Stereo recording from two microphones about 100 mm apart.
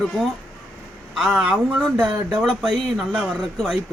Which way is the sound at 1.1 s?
10° right (ahead or behind).